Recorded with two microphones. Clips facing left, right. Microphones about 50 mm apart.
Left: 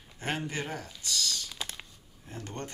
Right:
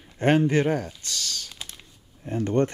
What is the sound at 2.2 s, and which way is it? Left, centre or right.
Speech, right.